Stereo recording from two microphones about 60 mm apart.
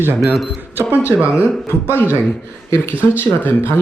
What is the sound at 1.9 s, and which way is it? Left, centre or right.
Speech, left.